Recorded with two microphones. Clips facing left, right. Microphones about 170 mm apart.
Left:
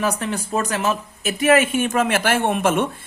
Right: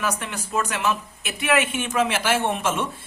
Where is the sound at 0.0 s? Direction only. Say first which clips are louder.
Left 5 dB; 35° left (ahead or behind).